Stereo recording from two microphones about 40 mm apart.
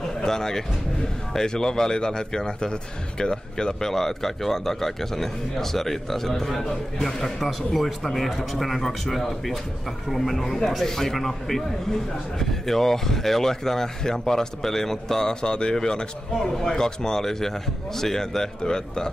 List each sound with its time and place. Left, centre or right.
0.2 s speech: centre